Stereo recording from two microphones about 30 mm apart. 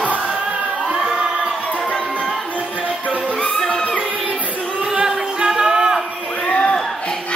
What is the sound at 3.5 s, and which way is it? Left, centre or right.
Music, centre.